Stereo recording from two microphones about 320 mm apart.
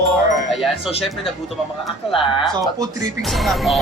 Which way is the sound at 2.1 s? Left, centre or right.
Centre.